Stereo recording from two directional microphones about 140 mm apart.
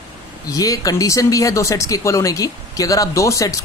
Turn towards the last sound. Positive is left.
turn(degrees=25)  # may be behind; listen again after turning